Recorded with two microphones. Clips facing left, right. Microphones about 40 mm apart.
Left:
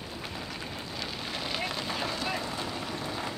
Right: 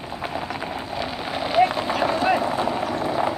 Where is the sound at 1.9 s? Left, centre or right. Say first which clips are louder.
Right 12 dB; right.